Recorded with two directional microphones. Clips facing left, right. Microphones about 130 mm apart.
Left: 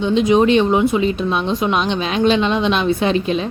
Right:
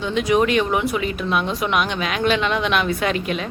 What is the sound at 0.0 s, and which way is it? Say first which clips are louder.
Speech: left 5 dB; 20° left (ahead or behind).